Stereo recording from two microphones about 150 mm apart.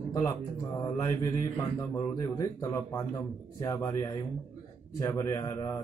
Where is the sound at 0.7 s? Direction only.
20° left (ahead or behind).